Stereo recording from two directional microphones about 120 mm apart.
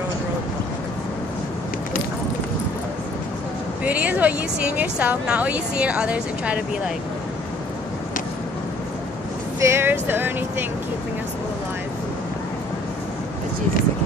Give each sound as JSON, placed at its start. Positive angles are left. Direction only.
{"t": 3.8, "sound": "speech", "side_deg": -10}
{"t": 9.6, "sound": "speech", "side_deg": -20}